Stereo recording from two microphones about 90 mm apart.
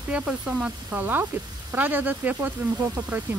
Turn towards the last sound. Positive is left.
turn(degrees=-20)  # may be behind; listen again after turning